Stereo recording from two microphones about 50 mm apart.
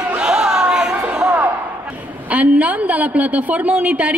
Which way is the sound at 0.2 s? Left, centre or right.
Centre.